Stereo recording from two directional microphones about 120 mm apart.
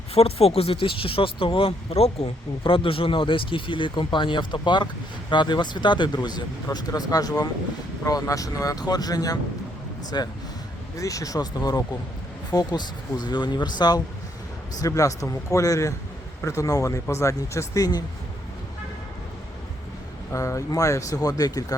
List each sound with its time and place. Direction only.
0.1 s speech: 55° left (ahead or behind); by 18.0 s 30° left (ahead or behind)
20.3 s speech: 25° left (ahead or behind)